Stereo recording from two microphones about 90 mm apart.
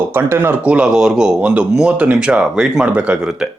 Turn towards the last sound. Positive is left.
turn(degrees=-10)  # may be behind; listen again after turning